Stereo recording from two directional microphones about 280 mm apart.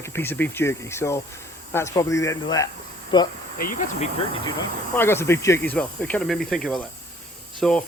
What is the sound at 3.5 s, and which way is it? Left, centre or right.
Speech, left.